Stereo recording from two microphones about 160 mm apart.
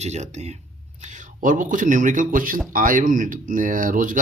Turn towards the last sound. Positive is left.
turn(degrees=-60)  # may be behind; listen again after turning